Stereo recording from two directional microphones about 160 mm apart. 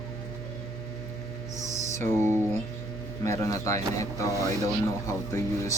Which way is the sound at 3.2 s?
20° left (ahead or behind).